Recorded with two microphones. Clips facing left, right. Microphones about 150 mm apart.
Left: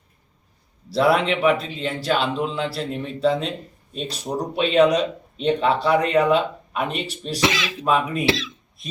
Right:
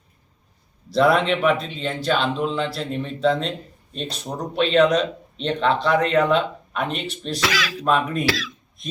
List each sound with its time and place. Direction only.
0.9 s a man's voice: 5° left (ahead or behind)
7.4 s speech: 25° left (ahead or behind)
7.9 s speech: 5° left (ahead or behind)
8.2 s speech: 25° left (ahead or behind)